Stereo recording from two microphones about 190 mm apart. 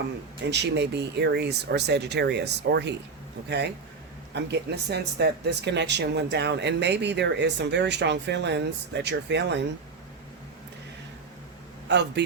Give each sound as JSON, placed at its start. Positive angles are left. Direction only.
{"t": 0.4, "sound": "speech", "side_deg": -65}
{"t": 4.4, "sound": "speech", "side_deg": -60}
{"t": 11.9, "sound": "speech", "side_deg": -65}